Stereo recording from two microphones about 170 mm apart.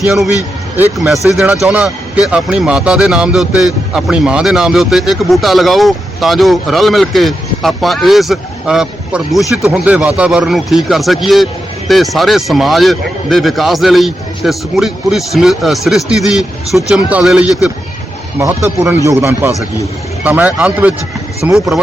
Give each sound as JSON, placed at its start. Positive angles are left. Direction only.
{"t": 0.0, "sound": "speech", "side_deg": 0}
{"t": 18.3, "sound": "a man's voice", "side_deg": -15}